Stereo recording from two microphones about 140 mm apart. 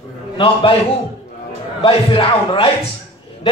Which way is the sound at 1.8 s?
40° left (ahead or behind).